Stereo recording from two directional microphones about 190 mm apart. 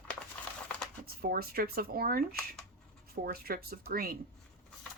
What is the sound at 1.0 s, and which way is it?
Speech, 50° right (ahead or behind).